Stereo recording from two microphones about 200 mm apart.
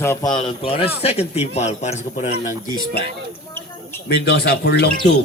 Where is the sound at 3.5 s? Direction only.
10° left (ahead or behind).